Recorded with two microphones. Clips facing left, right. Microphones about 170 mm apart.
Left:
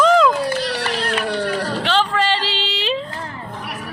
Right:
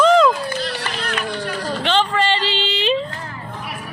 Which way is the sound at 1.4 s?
70° left (ahead or behind).